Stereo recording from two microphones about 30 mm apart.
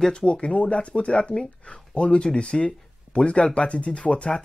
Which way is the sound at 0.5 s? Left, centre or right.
Left.